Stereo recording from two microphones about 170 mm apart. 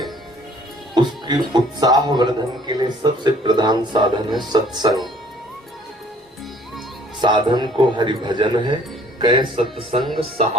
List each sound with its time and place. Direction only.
0.9 s speech: 25° right (ahead or behind)
7.2 s speech: 25° right (ahead or behind)